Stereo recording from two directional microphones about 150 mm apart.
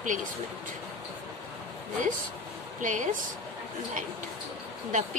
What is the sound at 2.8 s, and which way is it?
Speech, 60° right (ahead or behind).